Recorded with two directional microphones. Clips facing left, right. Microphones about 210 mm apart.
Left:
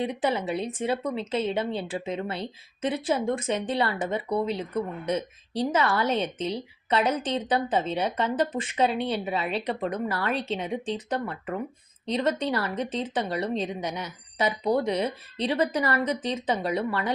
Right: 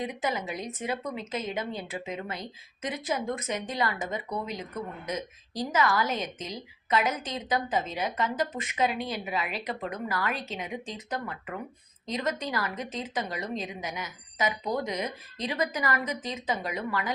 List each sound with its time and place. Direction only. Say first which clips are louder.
0.0 s a woman's voice: left 5 dB; 30° left (ahead or behind)
5.7 s a woman's voice: left 1 dB; 30° left (ahead or behind)